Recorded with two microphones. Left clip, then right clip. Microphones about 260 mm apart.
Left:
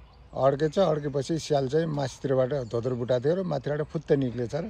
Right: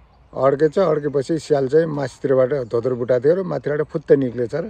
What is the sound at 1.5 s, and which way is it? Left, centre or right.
A man's voice, right.